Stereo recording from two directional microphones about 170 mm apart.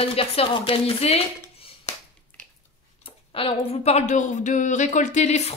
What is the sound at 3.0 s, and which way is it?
Speech, 35° left (ahead or behind).